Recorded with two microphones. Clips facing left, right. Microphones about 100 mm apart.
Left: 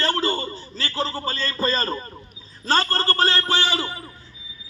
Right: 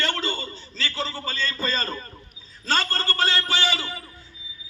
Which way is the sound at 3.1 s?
45° left (ahead or behind).